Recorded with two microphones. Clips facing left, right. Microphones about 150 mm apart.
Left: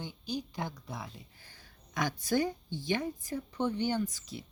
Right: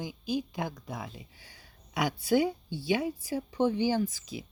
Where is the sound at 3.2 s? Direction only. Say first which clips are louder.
Right 5 dB; 90° right.